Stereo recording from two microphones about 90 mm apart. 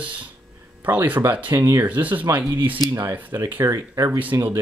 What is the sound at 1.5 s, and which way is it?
Speech, 40° right (ahead or behind).